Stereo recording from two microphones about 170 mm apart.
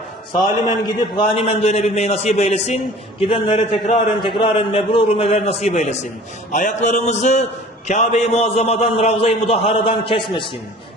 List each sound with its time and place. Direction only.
0.6 s a man's voice: 25° left (ahead or behind)